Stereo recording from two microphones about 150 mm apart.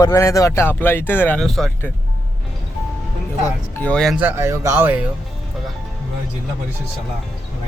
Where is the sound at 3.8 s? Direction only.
10° left (ahead or behind).